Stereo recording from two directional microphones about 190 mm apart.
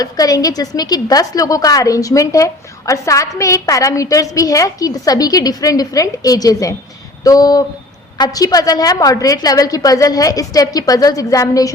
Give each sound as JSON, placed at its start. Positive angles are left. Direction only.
{"t": 0.0, "sound": "a woman's voice", "side_deg": 20}